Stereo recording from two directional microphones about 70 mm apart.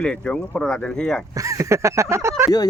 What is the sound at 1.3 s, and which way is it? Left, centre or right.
Speech, right.